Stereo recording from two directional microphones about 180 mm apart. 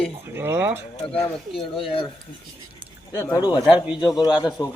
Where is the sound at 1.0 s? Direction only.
35° left (ahead or behind).